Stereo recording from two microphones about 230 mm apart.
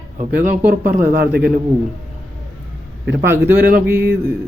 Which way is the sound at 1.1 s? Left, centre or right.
Right.